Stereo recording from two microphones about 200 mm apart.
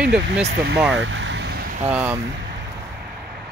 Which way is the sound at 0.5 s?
55° right (ahead or behind).